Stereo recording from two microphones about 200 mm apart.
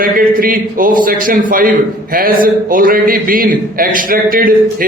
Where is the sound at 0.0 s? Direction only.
45° right (ahead or behind).